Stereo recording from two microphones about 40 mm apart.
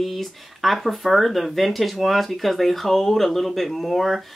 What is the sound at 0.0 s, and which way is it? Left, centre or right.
Speech, centre.